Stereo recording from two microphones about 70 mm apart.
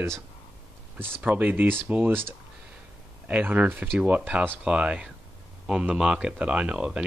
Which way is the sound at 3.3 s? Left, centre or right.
Right.